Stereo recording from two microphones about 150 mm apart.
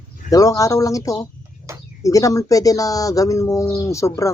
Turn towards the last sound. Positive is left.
turn(degrees=20)  # may be behind; listen again after turning